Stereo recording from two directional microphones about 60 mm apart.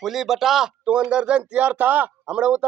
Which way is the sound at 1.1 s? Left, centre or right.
Centre.